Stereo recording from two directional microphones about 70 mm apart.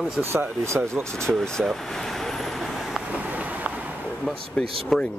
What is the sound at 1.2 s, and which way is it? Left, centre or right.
Speech, centre.